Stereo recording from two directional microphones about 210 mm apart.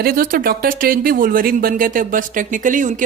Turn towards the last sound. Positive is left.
turn(degrees=-40)  # may be behind; listen again after turning